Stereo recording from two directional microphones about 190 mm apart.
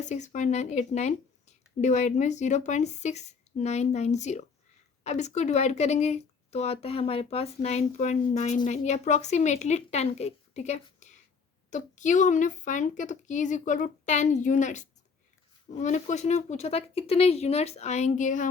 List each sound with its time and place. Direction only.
0.0 s speech: 40° left (ahead or behind)